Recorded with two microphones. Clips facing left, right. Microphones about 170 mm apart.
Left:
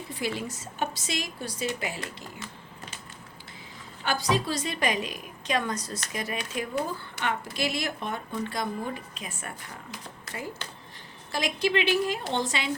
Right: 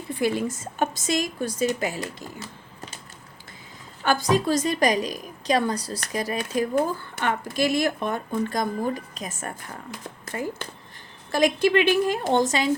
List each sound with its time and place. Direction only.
0.1 s speech: 50° right (ahead or behind)
4.0 s a woman's voice: 45° right (ahead or behind)